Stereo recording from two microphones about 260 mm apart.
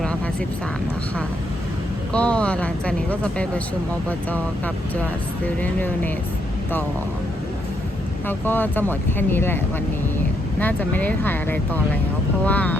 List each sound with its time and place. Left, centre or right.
2.1 s speech: centre
5.5 s speech: centre
8.3 s speech: centre